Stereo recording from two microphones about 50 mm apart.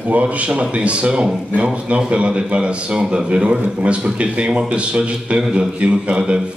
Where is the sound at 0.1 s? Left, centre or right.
Right.